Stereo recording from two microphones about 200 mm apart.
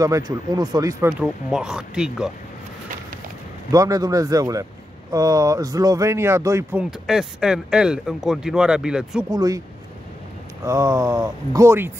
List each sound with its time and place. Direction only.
0.0 s speech: 15° right (ahead or behind)
1.2 s speech: 5° right (ahead or behind)
3.7 s speech: 15° right (ahead or behind)
9.3 s speech: 20° right (ahead or behind)
10.6 s speech: 15° right (ahead or behind)